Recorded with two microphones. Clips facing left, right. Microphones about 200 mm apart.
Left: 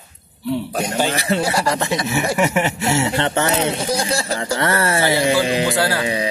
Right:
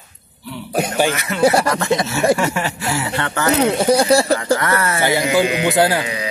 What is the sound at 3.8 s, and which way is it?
Speech, 60° right (ahead or behind).